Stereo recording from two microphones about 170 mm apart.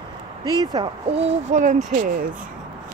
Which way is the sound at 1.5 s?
45° right (ahead or behind).